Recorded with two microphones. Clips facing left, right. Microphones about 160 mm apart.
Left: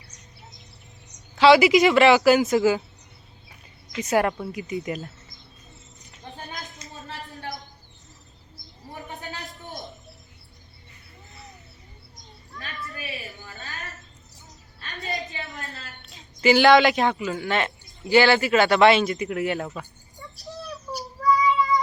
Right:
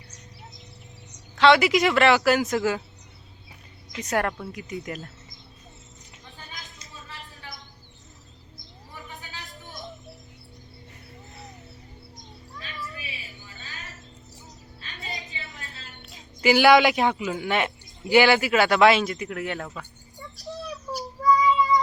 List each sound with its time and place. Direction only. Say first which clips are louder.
1.4 s a man's voice: left 3 dB; 5° left (ahead or behind)
3.9 s a man's voice: left 4 dB; 5° left (ahead or behind)
6.2 s a sound: left 7 dB; 40° left (ahead or behind)
9.0 s a sound: left 5 dB; 40° left (ahead or behind)
12.5 s cat: left 2 dB; 60° left (ahead or behind)
14.8 s a sound: left 7 dB; 60° left (ahead or behind)
16.1 s a woman's voice: left 2 dB; 5° right (ahead or behind)
17.2 s a man's voice: even; 15° right (ahead or behind); by 19.5 s 5° left (ahead or behind)
19.5 s speech: left 4 dB; 20° left (ahead or behind)